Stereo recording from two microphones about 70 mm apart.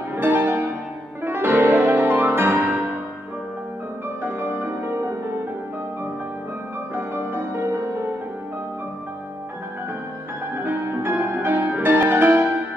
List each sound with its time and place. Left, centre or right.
0.1 s music: right
4.2 s music: right
7.0 s music: right
10.5 s music: right